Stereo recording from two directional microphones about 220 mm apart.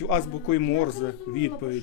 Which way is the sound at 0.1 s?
65° left (ahead or behind).